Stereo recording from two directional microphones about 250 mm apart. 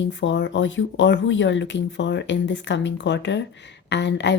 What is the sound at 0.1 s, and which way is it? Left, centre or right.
Speech, left.